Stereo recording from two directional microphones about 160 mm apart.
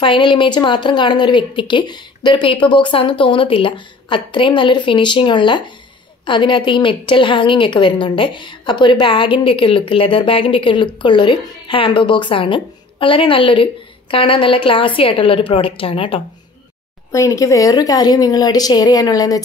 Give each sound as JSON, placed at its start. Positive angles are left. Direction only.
{"t": 0.0, "sound": "speech", "side_deg": 30}
{"t": 17.1, "sound": "speech", "side_deg": 20}